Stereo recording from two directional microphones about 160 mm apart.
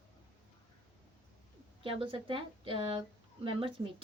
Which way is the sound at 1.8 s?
35° right (ahead or behind).